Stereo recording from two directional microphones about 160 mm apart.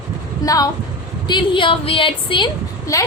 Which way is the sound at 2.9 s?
20° left (ahead or behind).